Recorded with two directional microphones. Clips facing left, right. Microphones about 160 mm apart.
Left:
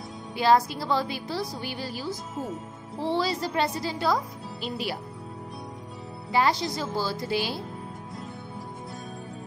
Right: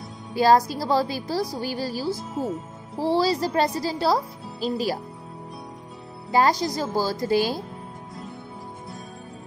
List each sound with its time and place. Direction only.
0.3 s speech: 40° right (ahead or behind)
6.3 s speech: 40° right (ahead or behind)